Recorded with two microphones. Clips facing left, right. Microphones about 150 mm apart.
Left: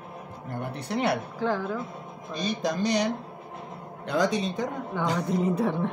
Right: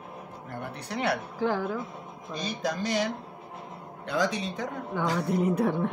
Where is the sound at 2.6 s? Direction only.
20° left (ahead or behind).